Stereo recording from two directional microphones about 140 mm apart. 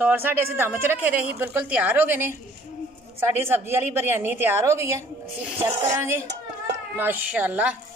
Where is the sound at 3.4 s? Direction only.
15° right (ahead or behind).